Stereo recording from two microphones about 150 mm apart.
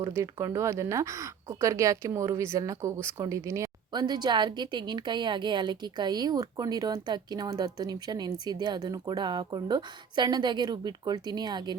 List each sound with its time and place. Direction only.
0.0 s speech: 20° right (ahead or behind)